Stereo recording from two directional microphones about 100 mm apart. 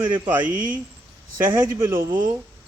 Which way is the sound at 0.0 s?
20° right (ahead or behind).